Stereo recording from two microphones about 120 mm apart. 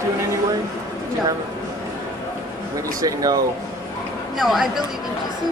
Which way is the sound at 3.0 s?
30° right (ahead or behind).